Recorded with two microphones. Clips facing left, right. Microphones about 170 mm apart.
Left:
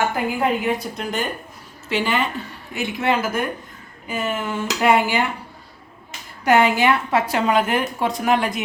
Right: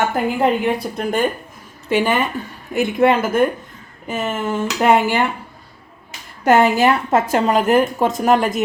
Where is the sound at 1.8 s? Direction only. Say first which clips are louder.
Right 4 dB; 50° right (ahead or behind).